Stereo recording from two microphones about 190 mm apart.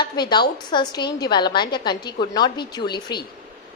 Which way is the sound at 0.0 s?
25° left (ahead or behind).